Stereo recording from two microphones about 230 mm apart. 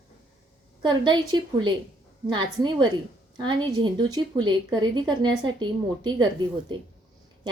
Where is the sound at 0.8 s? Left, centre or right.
Centre.